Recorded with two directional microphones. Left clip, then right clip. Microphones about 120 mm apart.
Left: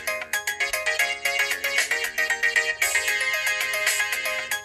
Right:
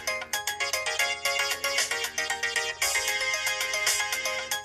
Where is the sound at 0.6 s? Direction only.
15° left (ahead or behind).